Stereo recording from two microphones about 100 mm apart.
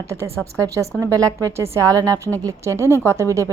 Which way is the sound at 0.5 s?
30° right (ahead or behind).